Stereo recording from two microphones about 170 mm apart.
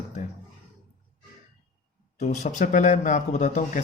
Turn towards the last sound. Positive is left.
turn(degrees=45)  # may be behind; listen again after turning